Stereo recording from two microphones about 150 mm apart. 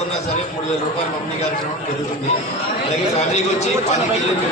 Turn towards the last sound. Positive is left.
turn(degrees=50)  # may be behind; listen again after turning